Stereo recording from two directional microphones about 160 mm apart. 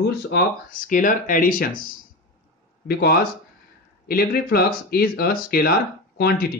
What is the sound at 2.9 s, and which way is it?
Speech, 75° left (ahead or behind).